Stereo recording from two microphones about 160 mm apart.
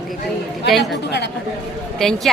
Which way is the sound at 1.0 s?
90° left.